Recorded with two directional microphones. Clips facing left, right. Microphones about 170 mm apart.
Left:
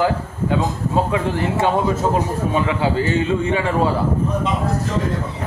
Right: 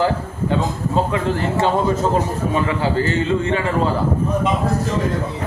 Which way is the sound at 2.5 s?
15° left (ahead or behind).